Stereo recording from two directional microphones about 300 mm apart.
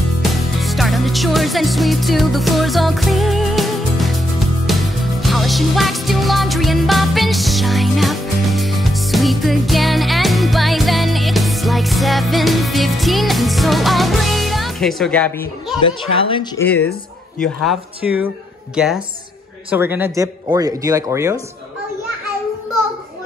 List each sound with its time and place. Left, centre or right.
0.2 s music: centre
16.1 s speech: centre
16.6 s speech: centre